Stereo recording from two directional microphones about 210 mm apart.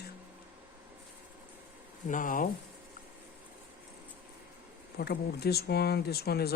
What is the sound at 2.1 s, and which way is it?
Speech, 40° left (ahead or behind).